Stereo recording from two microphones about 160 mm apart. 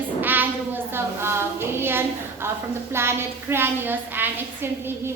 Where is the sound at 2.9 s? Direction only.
15° right (ahead or behind).